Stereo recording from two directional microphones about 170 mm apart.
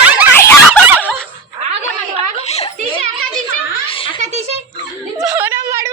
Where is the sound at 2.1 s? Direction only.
40° left (ahead or behind).